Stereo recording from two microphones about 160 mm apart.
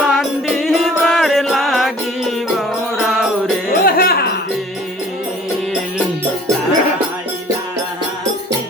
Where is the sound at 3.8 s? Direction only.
70° left (ahead or behind).